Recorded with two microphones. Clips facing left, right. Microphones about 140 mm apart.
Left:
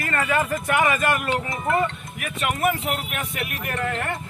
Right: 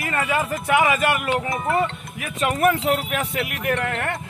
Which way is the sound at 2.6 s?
90° right.